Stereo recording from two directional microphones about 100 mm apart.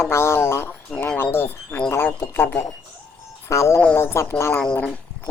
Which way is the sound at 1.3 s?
20° left (ahead or behind).